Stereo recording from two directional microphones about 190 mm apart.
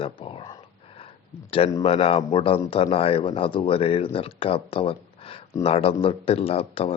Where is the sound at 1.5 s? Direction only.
30° left (ahead or behind).